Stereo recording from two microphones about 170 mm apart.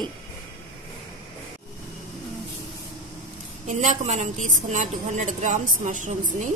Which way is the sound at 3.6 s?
40° right (ahead or behind).